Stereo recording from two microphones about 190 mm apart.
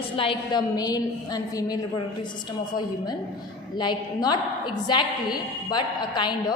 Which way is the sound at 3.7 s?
20° left (ahead or behind).